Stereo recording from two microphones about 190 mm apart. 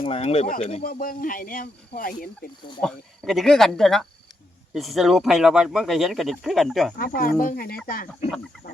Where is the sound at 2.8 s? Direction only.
Centre (ahead or behind).